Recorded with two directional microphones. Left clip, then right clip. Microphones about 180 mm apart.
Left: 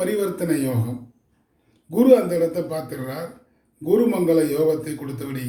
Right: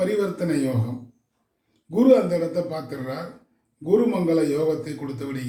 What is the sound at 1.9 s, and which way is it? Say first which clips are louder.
A man's voice: left 2 dB; 15° left (ahead or behind).